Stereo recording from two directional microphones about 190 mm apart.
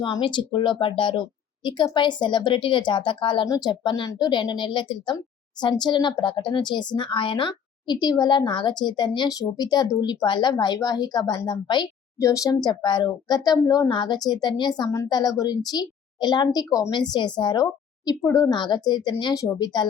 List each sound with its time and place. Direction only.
0.0 s a woman's voice: 25° left (ahead or behind)